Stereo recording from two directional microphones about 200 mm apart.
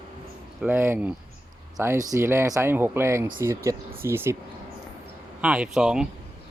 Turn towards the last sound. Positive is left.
turn(degrees=-5)  # may be behind; listen again after turning